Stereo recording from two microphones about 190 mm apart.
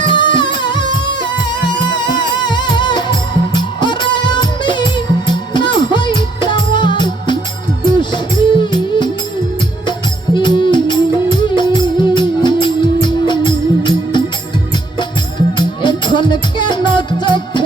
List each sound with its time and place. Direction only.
0.0 s music: 25° left (ahead or behind)
2.4 s music: 25° left (ahead or behind)
10.3 s music: 25° left (ahead or behind)
15.5 s music: 25° left (ahead or behind)